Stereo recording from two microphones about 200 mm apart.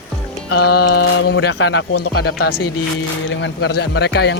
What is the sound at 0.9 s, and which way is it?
Speech, 90° left.